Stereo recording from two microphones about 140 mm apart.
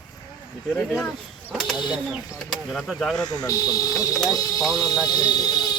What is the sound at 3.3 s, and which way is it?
Speech, 25° left (ahead or behind).